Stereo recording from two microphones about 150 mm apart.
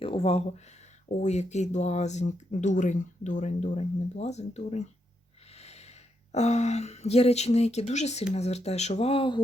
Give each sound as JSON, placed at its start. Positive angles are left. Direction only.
{"t": 0.0, "sound": "speech", "side_deg": 40}
{"t": 5.5, "sound": "a sound", "side_deg": 45}
{"t": 6.3, "sound": "speech", "side_deg": 45}